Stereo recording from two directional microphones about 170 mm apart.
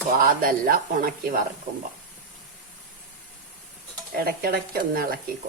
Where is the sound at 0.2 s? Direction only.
55° right (ahead or behind).